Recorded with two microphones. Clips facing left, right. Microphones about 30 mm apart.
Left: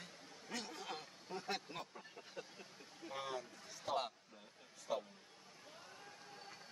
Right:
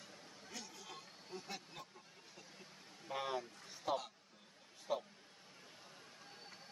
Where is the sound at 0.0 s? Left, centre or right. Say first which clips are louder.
Left 1 dB; left.